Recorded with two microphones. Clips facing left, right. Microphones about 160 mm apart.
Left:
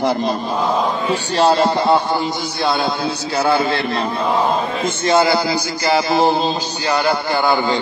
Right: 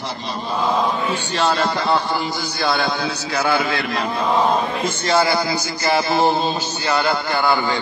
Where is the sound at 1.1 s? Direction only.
35° left (ahead or behind).